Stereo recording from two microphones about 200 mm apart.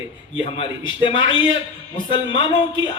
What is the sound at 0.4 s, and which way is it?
A man's voice, 25° left (ahead or behind).